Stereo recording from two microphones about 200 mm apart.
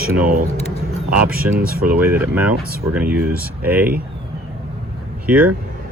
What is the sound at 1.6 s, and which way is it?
Speech, 50° right (ahead or behind).